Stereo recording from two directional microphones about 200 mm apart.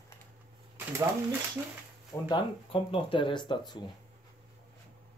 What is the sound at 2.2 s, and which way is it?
Speech, 25° left (ahead or behind).